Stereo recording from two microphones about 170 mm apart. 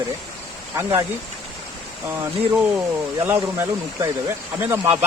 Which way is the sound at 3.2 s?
10° right (ahead or behind).